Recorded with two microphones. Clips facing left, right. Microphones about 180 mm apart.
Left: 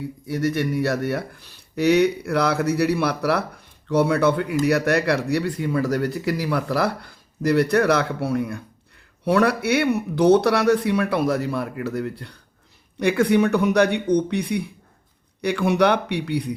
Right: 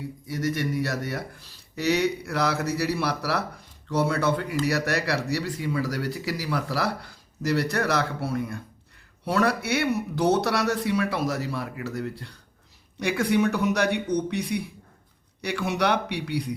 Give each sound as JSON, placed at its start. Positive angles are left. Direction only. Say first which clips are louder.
{"t": 0.3, "sound": "speech", "louder": "left 5 dB", "side_deg": 60}